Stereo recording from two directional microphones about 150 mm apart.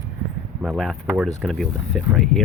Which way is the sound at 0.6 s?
Centre (ahead or behind).